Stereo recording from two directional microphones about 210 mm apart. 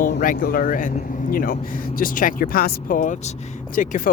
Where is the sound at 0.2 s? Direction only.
45° left (ahead or behind).